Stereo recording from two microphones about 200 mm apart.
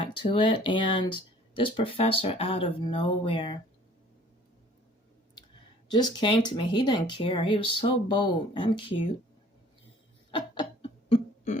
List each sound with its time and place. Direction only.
0.0 s speech: 25° left (ahead or behind)
5.9 s speech: 20° left (ahead or behind)
10.3 s a sound: 25° left (ahead or behind)